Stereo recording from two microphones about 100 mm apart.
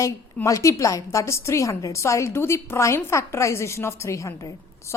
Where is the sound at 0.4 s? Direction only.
30° left (ahead or behind).